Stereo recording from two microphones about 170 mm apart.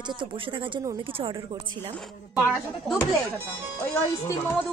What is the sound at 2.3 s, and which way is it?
Speech, 15° left (ahead or behind).